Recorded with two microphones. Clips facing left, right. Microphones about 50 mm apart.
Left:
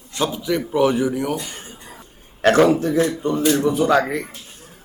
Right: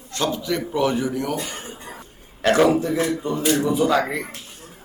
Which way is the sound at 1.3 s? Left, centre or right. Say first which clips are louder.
Right 2 dB; right.